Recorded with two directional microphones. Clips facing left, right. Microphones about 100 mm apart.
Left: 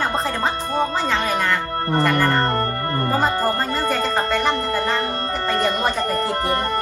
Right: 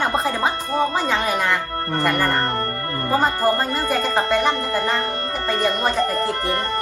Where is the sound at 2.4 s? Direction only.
25° left (ahead or behind).